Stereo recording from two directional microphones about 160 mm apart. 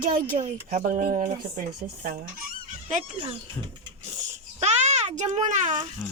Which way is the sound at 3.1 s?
35° right (ahead or behind).